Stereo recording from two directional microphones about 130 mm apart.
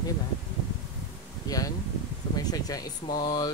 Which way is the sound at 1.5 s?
30° left (ahead or behind).